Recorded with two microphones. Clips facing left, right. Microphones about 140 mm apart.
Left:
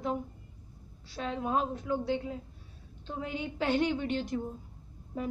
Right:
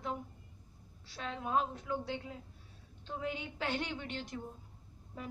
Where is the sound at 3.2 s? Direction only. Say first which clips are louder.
Left 6 dB; 5° left (ahead or behind).